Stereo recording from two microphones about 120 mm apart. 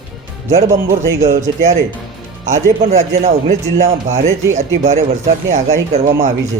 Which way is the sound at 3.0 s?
70° right (ahead or behind).